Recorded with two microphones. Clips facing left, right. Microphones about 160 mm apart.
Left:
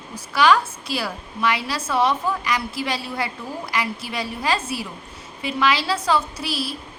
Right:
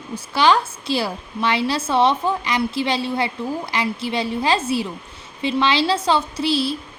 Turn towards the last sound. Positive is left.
turn(degrees=-25)  # may be behind; listen again after turning